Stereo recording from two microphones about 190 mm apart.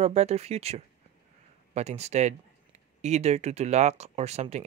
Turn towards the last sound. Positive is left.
turn(degrees=-35)  # may be behind; listen again after turning